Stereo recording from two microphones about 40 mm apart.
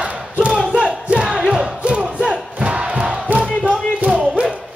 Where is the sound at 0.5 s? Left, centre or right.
Centre.